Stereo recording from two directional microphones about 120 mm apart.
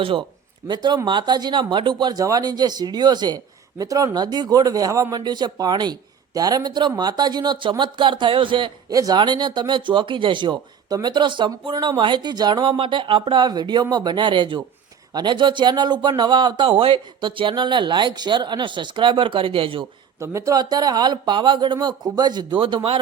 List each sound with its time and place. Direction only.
0.0 s speech: 45° right (ahead or behind)
8.9 s speech: 30° right (ahead or behind); by 19.9 s 45° right (ahead or behind)
20.1 s speech: 25° right (ahead or behind); by 23.0 s 45° right (ahead or behind)